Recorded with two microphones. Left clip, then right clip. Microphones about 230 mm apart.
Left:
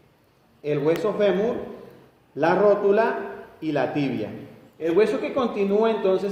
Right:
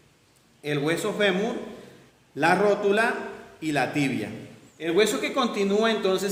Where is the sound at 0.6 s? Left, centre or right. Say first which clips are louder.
Left 4 dB; right.